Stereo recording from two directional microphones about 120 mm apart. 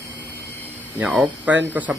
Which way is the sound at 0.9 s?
10° right (ahead or behind).